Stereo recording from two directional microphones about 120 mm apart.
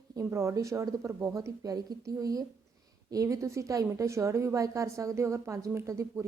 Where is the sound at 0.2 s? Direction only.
25° right (ahead or behind).